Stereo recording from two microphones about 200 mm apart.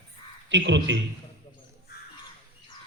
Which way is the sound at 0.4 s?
60° right (ahead or behind).